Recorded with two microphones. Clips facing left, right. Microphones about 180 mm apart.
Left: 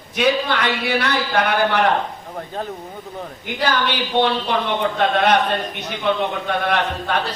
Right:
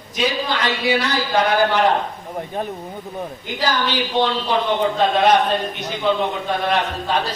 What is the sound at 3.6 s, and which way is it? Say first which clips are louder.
Speech: even; 60° left (ahead or behind).